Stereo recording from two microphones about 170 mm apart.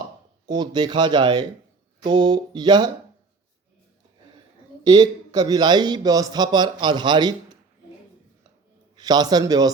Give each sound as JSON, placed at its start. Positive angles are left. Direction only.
{"t": 0.4, "sound": "speech", "side_deg": -25}
{"t": 4.8, "sound": "speech", "side_deg": -25}
{"t": 9.0, "sound": "speech", "side_deg": -25}